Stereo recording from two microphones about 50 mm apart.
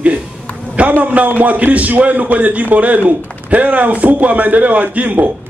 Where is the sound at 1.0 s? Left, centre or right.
Right.